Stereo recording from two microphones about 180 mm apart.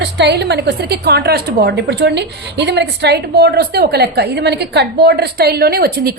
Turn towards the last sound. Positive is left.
turn(degrees=-55)  # may be behind; listen again after turning